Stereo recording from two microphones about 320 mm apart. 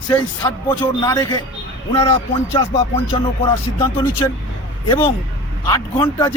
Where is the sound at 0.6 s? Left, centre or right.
Centre.